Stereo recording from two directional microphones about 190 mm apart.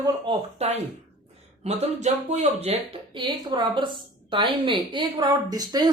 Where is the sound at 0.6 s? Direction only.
35° right (ahead or behind).